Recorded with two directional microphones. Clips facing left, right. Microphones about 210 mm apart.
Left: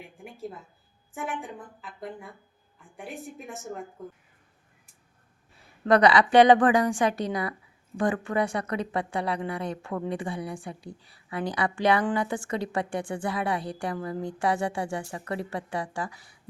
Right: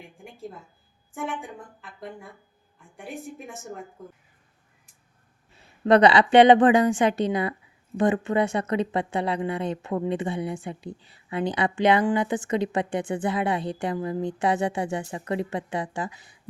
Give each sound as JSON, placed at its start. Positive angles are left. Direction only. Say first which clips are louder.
{"t": 1.1, "sound": "a woman's voice", "louder": "right 2 dB", "side_deg": 0}
{"t": 5.5, "sound": "a woman's voice", "louder": "right 3 dB", "side_deg": -25}